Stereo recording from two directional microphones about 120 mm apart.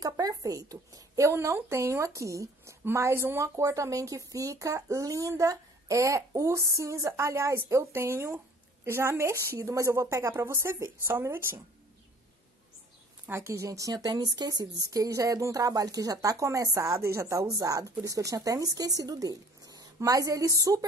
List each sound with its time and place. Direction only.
0.0 s a woman's voice: 30° right (ahead or behind)
13.3 s a woman's voice: 25° right (ahead or behind)